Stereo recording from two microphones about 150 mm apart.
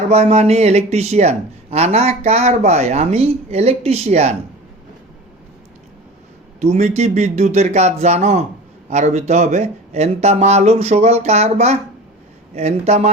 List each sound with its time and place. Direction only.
0.1 s speech: 45° right (ahead or behind)
6.6 s speech: 50° right (ahead or behind)